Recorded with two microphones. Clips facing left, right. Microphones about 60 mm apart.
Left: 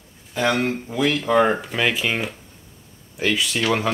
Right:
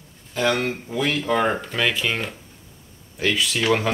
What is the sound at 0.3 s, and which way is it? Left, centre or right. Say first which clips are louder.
Speech: left 1 dB; centre.